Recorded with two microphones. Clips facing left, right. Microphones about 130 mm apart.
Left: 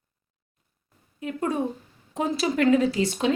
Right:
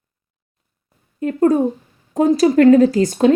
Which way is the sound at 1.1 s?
45° right (ahead or behind).